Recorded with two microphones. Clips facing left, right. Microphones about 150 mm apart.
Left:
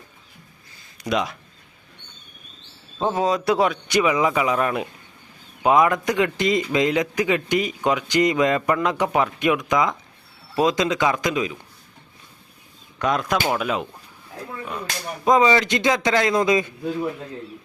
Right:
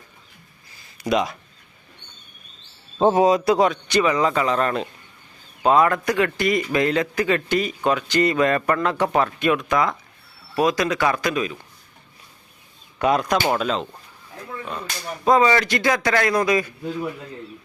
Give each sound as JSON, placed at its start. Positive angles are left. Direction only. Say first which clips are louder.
{"t": 0.9, "sound": "speech", "louder": "right 2 dB", "side_deg": 0}
{"t": 3.0, "sound": "a man's voice", "louder": "right 6 dB", "side_deg": -25}
{"t": 3.2, "sound": "a man's voice", "louder": "right 3 dB", "side_deg": -5}
{"t": 13.0, "sound": "a man's voice", "louder": "right 2 dB", "side_deg": -5}